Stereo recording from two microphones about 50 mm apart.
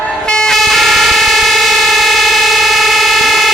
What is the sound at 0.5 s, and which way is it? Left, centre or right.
Vehicle, centre.